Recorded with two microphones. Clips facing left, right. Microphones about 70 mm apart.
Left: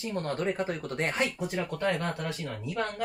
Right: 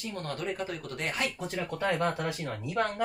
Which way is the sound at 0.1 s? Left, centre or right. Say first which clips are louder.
Left 5 dB; left.